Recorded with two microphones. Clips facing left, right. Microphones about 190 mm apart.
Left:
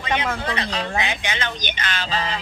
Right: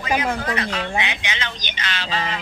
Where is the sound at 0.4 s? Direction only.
35° left (ahead or behind).